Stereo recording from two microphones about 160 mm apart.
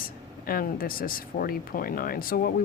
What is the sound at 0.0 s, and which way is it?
Speech, 65° left (ahead or behind).